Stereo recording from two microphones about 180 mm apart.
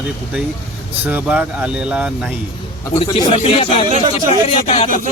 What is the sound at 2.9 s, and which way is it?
Speech, 30° left (ahead or behind).